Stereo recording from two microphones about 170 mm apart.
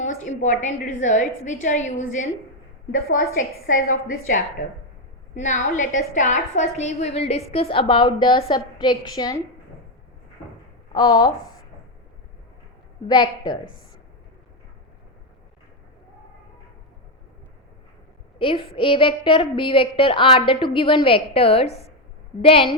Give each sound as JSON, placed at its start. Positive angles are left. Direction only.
{"t": 0.0, "sound": "a woman's voice", "side_deg": 45}
{"t": 3.7, "sound": "a woman's voice", "side_deg": 55}
{"t": 10.9, "sound": "a woman's voice", "side_deg": 25}
{"t": 13.1, "sound": "a woman's voice", "side_deg": 25}
{"t": 18.3, "sound": "a woman's voice", "side_deg": 30}